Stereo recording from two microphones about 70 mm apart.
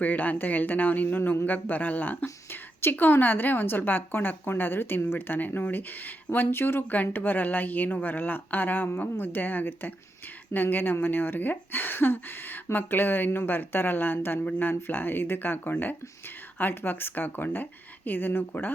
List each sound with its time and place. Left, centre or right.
0.0 s a woman's voice: left
2.2 s whispering: left
2.9 s a woman's voice: left